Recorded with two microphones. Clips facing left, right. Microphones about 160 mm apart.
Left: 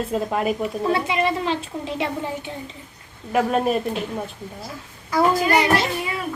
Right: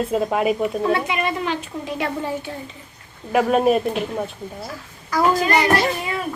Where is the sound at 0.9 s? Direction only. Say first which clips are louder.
Left 1 dB; 25° left (ahead or behind).